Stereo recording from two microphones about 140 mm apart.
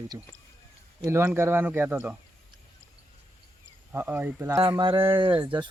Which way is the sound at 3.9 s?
15° right (ahead or behind).